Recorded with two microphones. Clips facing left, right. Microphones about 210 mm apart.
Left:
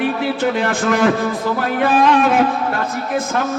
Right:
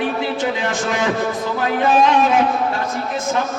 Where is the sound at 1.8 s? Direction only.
55° left (ahead or behind).